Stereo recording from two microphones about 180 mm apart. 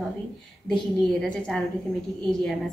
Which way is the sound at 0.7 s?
5° left (ahead or behind).